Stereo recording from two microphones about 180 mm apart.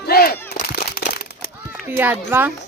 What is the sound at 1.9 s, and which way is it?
Speech, 10° right (ahead or behind).